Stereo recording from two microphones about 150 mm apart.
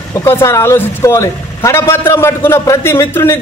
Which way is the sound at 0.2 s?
15° left (ahead or behind).